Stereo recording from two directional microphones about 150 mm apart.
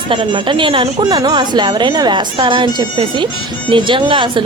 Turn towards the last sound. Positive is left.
turn(degrees=-35)  # may be behind; listen again after turning